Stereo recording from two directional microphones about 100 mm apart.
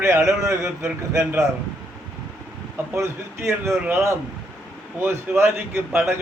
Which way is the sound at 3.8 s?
25° right (ahead or behind).